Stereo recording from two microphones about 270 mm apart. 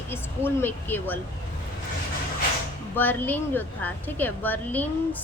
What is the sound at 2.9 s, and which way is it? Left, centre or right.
A woman's voice, centre.